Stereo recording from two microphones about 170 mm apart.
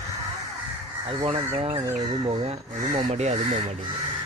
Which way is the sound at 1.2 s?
35° right (ahead or behind).